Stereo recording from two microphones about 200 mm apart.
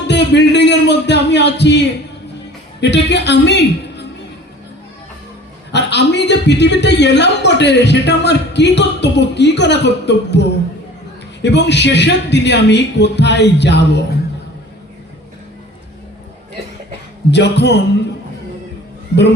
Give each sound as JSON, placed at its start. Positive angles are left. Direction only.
{"t": 0.1, "sound": "a man's voice", "side_deg": 60}
{"t": 5.7, "sound": "a man's voice", "side_deg": 60}
{"t": 11.4, "sound": "a man's voice", "side_deg": 60}
{"t": 17.3, "sound": "a man's voice", "side_deg": 60}